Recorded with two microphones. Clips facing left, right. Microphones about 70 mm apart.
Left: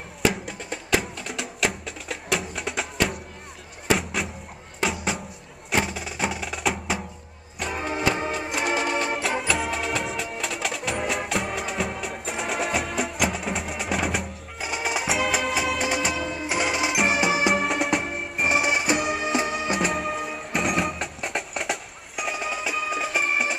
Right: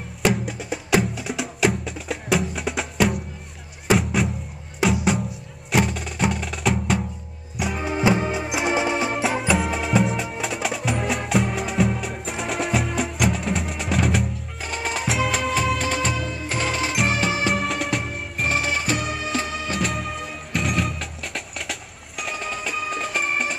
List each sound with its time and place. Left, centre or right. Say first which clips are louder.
0.2 s music: right 3 dB; centre
9.1 s music: right 3 dB; centre
17.6 s music: left 1 dB; centre
18.5 s music: left 1 dB; centre
19.8 s music: left 1 dB; centre